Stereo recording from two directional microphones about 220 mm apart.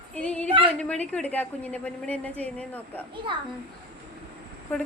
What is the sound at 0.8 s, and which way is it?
A woman's voice, 5° left (ahead or behind).